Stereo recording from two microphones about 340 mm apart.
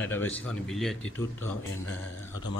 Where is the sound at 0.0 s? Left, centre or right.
Centre.